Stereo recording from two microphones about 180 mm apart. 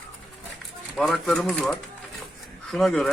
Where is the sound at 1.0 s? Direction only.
Centre (ahead or behind).